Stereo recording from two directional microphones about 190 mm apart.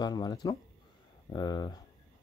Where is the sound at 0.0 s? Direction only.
20° left (ahead or behind).